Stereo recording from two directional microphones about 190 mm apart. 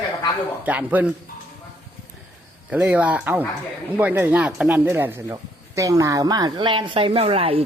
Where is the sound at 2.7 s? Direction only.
5° right (ahead or behind); by 7.6 s 30° right (ahead or behind).